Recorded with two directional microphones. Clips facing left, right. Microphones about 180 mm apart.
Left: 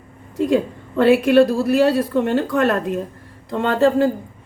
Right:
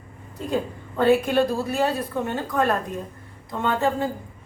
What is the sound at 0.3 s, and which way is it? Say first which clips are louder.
A woman's voice: left 8 dB; 80° left.